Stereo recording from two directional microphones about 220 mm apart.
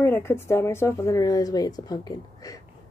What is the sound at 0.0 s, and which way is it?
A woman's voice, 10° left (ahead or behind).